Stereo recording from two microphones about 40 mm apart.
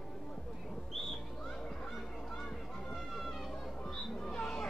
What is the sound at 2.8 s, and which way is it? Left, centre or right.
Run, centre.